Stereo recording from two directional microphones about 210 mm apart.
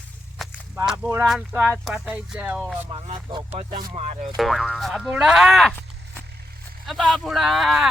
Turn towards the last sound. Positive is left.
turn(degrees=0)  # may be behind; listen again after turning